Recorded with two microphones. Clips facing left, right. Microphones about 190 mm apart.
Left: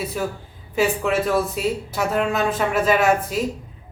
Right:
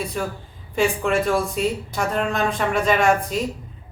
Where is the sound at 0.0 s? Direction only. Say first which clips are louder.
Left 1 dB; 5° left (ahead or behind).